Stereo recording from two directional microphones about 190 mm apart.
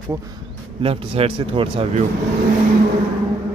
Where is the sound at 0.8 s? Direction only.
30° right (ahead or behind).